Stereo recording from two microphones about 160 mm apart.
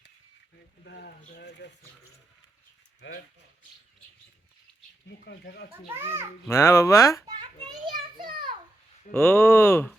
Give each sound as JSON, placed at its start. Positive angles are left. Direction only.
{"t": 0.9, "sound": "speech", "side_deg": 90}
{"t": 5.0, "sound": "speech", "side_deg": 90}
{"t": 5.9, "sound": "a child's voice", "side_deg": -15}
{"t": 6.5, "sound": "speech", "side_deg": 15}
{"t": 7.3, "sound": "children playing", "side_deg": -30}
{"t": 7.9, "sound": "a sound", "side_deg": -30}
{"t": 9.1, "sound": "speech", "side_deg": 15}